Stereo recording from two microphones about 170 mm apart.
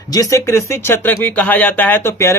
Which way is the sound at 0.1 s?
20° left (ahead or behind).